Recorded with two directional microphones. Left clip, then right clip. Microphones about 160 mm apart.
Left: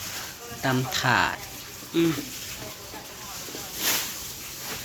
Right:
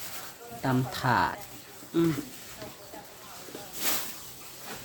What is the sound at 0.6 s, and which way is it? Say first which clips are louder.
Speech: left 4 dB; 30° right (ahead or behind).